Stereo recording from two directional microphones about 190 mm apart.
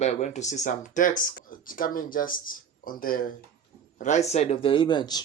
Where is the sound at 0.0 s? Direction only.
35° left (ahead or behind).